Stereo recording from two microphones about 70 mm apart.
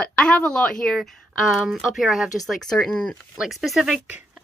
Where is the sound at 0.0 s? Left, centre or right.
Centre.